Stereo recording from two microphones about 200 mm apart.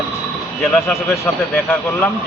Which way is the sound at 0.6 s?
Centre (ahead or behind).